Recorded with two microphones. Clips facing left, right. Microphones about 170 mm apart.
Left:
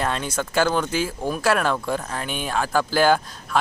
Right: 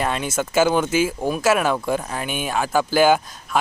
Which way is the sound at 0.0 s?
10° right (ahead or behind).